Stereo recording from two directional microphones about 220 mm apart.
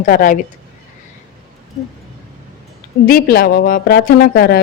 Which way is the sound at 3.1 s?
45° left (ahead or behind).